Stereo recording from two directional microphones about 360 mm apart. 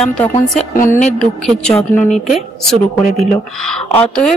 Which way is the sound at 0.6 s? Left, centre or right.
Left.